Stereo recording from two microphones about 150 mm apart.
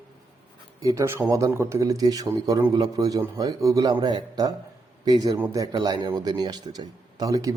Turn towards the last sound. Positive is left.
turn(degrees=-20)  # may be behind; listen again after turning